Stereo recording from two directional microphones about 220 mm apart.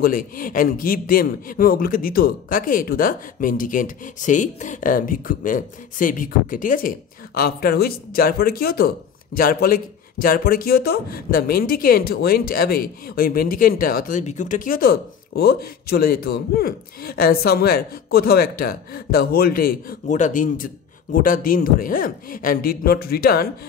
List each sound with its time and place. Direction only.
0.0 s a man's voice: 40° left (ahead or behind)